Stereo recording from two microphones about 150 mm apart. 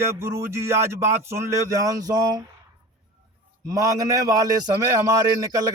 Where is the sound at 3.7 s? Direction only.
25° right (ahead or behind).